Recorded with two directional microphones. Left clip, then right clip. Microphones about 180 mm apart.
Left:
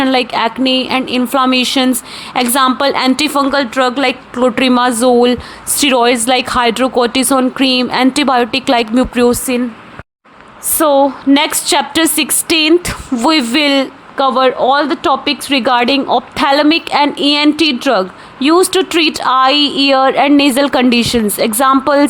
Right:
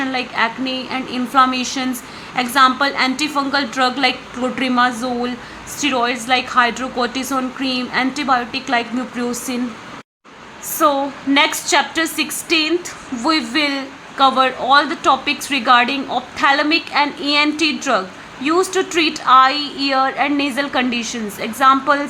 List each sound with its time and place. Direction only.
0.0 s a man's voice: 55° left (ahead or behind)
3.5 s a man's voice: 35° left (ahead or behind); by 9.3 s 55° left (ahead or behind)
10.8 s a man's voice: 45° left (ahead or behind)